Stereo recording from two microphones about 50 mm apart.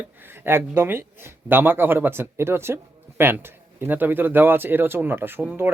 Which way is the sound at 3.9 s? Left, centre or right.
Right.